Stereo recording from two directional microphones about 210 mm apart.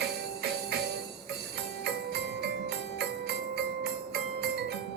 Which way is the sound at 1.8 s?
50° right (ahead or behind).